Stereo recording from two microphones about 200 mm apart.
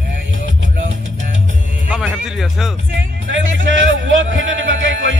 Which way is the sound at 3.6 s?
70° right (ahead or behind).